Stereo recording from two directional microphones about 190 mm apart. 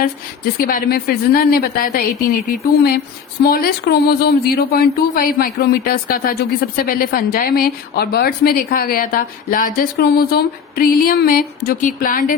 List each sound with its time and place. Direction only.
0.0 s a woman's voice: 50° left (ahead or behind)
3.4 s a woman's voice: 55° left (ahead or behind)